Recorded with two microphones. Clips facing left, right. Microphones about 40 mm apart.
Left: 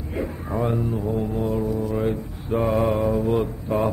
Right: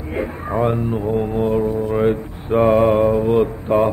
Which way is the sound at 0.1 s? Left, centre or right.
Right.